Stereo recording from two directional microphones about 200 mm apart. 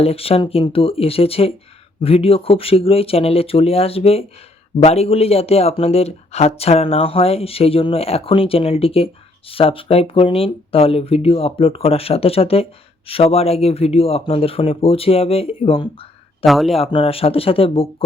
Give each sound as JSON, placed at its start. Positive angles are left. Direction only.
{"t": 0.0, "sound": "speech", "side_deg": 30}
{"t": 16.4, "sound": "a man's voice", "side_deg": 0}
{"t": 16.7, "sound": "speech", "side_deg": 30}